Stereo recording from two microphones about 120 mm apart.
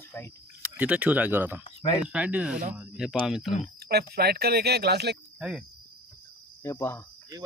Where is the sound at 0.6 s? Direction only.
10° right (ahead or behind).